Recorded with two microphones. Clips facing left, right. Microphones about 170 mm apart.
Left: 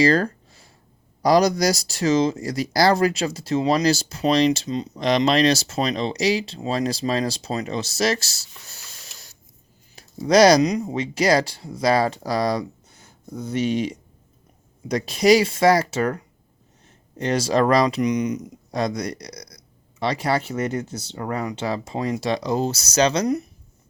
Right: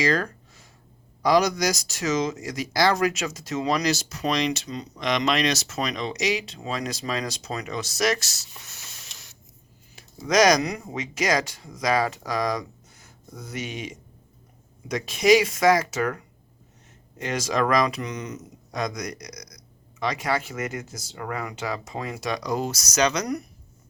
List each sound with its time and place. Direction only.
0.0 s a sound: 35° left (ahead or behind)
1.2 s speech: 35° left (ahead or behind)
9.9 s a sound: 30° left (ahead or behind)
10.6 s speech: 20° left (ahead or behind)
11.0 s speech: 35° left (ahead or behind)
18.0 s speech: 15° left (ahead or behind)
18.7 s speech: 30° left (ahead or behind)